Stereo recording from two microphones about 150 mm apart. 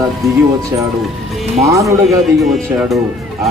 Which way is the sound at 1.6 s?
20° right (ahead or behind).